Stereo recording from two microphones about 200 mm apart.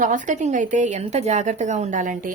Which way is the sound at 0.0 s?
40° right (ahead or behind).